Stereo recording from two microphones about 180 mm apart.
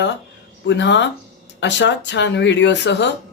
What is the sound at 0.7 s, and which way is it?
Speech, 80° left.